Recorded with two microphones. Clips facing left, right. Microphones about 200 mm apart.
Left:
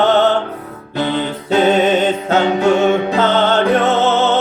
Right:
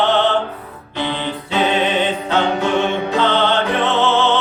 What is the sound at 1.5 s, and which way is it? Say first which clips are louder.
Music: left 6 dB; 45° left (ahead or behind).